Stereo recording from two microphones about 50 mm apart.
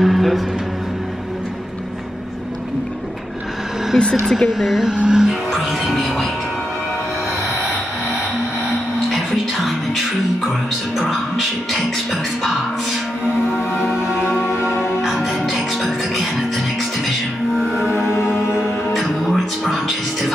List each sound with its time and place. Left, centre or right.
0.0 s music: centre
3.9 s speech: centre
4.8 s music: centre
5.5 s music: centre
11.0 s music: centre
15.0 s music: centre
18.1 s music: left
18.9 s music: centre